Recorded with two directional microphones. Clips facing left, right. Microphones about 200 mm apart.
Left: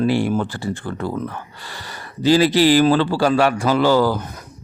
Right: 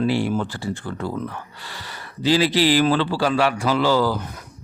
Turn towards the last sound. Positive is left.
turn(degrees=50)  # may be behind; listen again after turning